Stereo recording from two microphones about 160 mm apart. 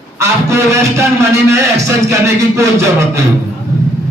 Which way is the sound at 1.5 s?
20° right (ahead or behind).